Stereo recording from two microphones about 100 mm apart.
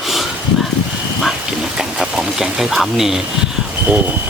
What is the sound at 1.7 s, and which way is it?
Speech, 5° right (ahead or behind).